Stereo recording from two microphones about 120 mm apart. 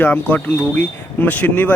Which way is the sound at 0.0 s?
15° left (ahead or behind).